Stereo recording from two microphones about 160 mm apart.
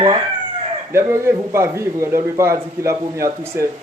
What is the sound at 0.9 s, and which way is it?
A man's voice, 15° right (ahead or behind).